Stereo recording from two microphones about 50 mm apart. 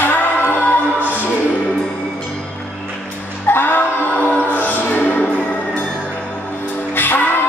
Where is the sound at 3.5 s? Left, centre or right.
Left.